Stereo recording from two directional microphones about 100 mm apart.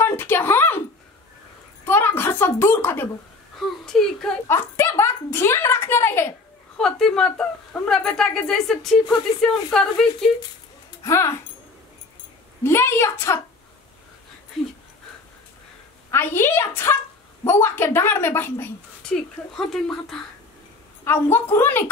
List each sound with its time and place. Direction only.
0.0 s a sound: 20° left (ahead or behind)
1.9 s a sound: 20° left (ahead or behind)
3.5 s speech: centre (ahead or behind)
4.5 s speech: 25° left (ahead or behind)
6.8 s speech: 5° left (ahead or behind)
11.1 s speech: 30° left (ahead or behind)
12.6 s speech: 25° left (ahead or behind)
16.1 s speech: 25° left (ahead or behind)
19.0 s speech: 5° left (ahead or behind)
21.0 s speech: 25° left (ahead or behind)